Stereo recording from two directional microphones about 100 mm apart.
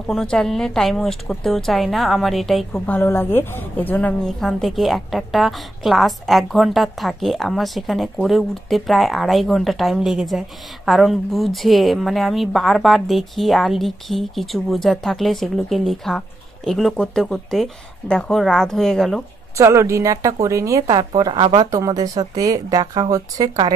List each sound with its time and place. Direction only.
0.1 s a woman's voice: 5° left (ahead or behind)
2.9 s a woman's voice: 25° left (ahead or behind)
4.2 s a woman's voice: 5° left (ahead or behind)
19.5 s speech: 30° right (ahead or behind)
20.9 s a woman's voice: 45° right (ahead or behind)
21.6 s speech: 35° right (ahead or behind)